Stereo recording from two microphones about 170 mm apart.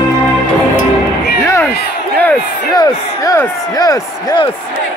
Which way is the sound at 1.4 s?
15° left (ahead or behind).